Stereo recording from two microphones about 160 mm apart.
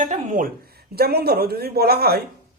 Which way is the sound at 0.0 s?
55° right (ahead or behind).